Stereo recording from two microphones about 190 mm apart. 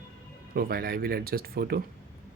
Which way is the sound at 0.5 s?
55° right (ahead or behind).